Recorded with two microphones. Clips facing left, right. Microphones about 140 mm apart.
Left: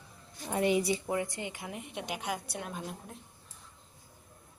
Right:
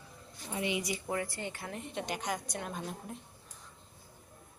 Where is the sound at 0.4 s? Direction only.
50° left (ahead or behind).